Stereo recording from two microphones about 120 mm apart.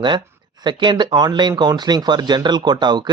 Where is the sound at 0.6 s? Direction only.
40° right (ahead or behind).